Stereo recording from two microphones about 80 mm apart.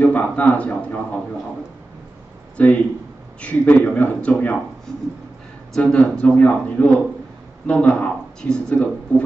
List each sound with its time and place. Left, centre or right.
0.0 s speech: centre
2.5 s speech: centre
5.8 s speech: centre